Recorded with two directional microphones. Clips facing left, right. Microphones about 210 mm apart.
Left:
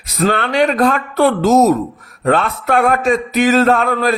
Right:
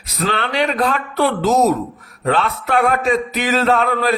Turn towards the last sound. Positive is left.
turn(degrees=45)  # may be behind; listen again after turning